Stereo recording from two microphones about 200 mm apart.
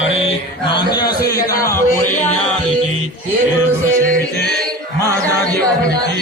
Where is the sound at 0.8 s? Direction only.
20° left (ahead or behind).